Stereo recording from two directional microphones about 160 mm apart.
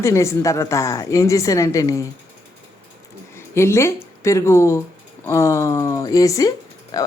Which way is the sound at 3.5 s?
15° left (ahead or behind).